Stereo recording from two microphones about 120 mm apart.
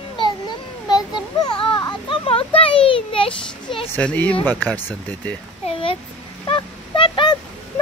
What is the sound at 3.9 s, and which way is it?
Speech, 10° left (ahead or behind).